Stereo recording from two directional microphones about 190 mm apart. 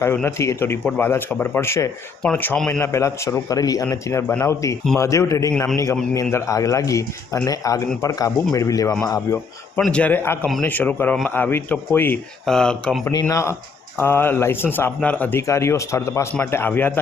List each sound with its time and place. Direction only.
0.0 s speech: 10° left (ahead or behind)
9.8 s speech: 5° left (ahead or behind)
13.1 s speech: 15° left (ahead or behind)